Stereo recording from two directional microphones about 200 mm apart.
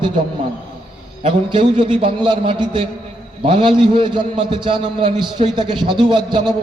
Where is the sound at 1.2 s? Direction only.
25° right (ahead or behind).